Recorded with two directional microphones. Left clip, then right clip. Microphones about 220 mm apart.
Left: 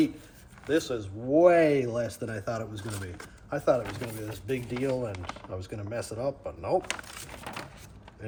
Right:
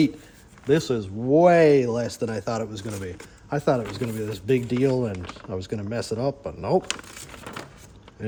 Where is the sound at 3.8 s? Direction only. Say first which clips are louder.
Right 5 dB; 5° right (ahead or behind).